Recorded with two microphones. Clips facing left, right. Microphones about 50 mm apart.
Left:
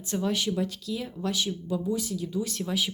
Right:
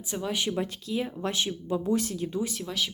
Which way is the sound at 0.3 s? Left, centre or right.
Right.